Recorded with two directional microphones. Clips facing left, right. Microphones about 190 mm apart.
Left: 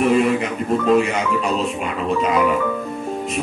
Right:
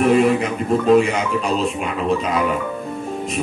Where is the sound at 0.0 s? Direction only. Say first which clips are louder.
Right 2 dB; centre (ahead or behind).